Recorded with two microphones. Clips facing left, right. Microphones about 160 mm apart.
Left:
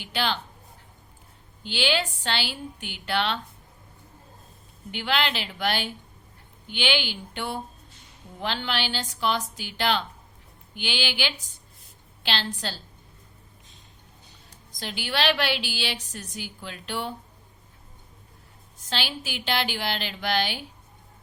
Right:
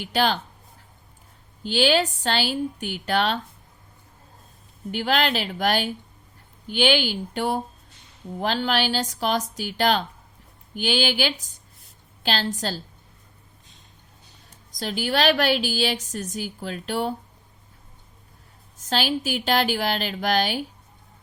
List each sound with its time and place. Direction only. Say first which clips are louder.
0.0 s a woman's voice: right 6 dB; 40° right (ahead or behind)
1.6 s a woman's voice: right 6 dB; 40° right (ahead or behind)
4.9 s a woman's voice: right 4 dB; 40° right (ahead or behind)
14.8 s a woman's voice: right 5 dB; 40° right (ahead or behind)
18.8 s a woman's voice: right 7 dB; 45° right (ahead or behind)